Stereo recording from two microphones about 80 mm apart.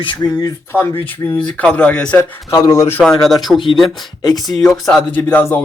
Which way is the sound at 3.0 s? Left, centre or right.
Centre.